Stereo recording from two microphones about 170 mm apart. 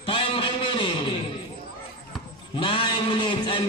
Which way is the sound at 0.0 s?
30° left (ahead or behind).